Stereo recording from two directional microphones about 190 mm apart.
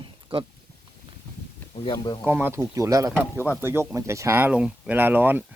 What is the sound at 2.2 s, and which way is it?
Speech, 10° right (ahead or behind).